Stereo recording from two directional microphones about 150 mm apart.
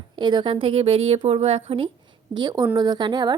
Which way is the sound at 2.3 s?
30° right (ahead or behind).